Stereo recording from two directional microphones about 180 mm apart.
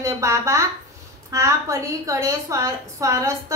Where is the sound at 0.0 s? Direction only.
15° right (ahead or behind).